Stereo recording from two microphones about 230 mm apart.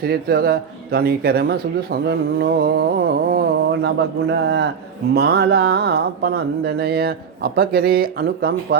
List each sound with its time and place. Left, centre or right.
0.0 s speech: right